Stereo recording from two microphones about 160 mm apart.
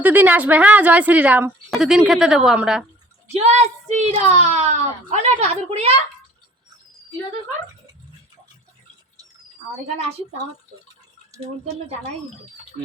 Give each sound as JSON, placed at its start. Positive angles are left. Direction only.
{"t": 0.0, "sound": "a woman's voice", "side_deg": -10}
{"t": 3.4, "sound": "a woman's voice", "side_deg": -45}